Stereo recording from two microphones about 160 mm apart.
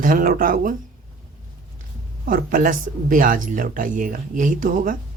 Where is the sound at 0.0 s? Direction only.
60° right (ahead or behind).